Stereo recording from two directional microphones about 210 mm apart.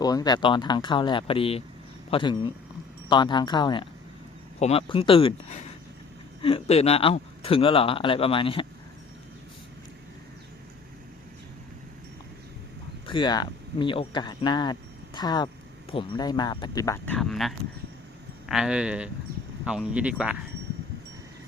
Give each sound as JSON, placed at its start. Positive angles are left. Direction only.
{"t": 0.0, "sound": "speech", "side_deg": 20}
{"t": 13.1, "sound": "speech", "side_deg": 20}
{"t": 17.2, "sound": "speech", "side_deg": 0}